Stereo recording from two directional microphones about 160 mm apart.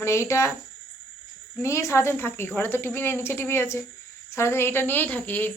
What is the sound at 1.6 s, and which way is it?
Speech, 20° left (ahead or behind).